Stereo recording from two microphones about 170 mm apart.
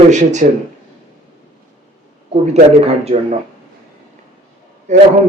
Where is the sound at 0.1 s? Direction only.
45° right (ahead or behind).